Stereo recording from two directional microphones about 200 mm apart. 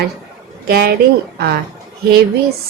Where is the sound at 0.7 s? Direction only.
50° right (ahead or behind).